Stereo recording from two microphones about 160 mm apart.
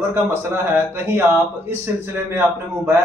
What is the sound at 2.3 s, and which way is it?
Speech, 15° right (ahead or behind).